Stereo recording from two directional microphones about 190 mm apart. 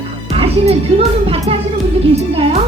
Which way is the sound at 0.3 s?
30° right (ahead or behind).